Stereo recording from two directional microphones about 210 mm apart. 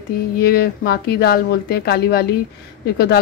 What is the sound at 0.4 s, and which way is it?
A woman's voice, 45° left (ahead or behind).